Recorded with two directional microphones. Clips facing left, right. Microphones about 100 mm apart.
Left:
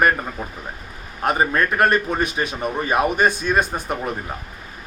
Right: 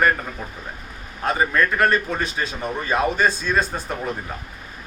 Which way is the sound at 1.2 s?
20° left (ahead or behind).